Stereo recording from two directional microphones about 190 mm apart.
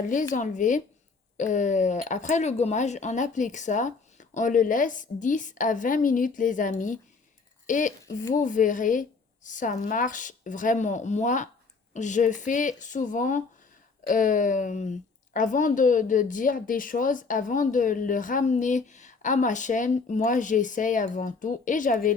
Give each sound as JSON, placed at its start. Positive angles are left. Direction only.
{"t": 0.0, "sound": "a woman's voice", "side_deg": 40}